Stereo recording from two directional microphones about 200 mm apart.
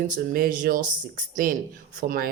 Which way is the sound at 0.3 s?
45° right (ahead or behind).